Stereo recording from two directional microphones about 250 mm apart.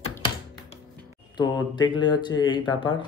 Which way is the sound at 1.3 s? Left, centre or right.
Centre.